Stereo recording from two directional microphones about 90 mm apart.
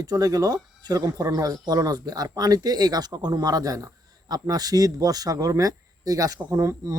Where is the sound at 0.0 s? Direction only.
45° right (ahead or behind).